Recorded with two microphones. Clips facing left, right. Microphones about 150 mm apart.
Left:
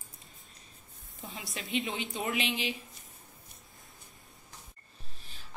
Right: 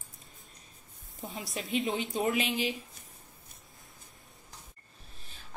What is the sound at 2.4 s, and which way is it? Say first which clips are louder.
Speech: right 2 dB; 45° right (ahead or behind).